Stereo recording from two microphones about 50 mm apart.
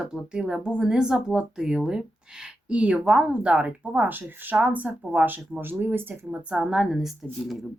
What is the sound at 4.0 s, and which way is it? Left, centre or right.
Speech, right.